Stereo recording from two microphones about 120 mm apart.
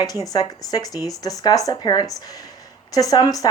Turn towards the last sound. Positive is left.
turn(degrees=30)  # may be behind; listen again after turning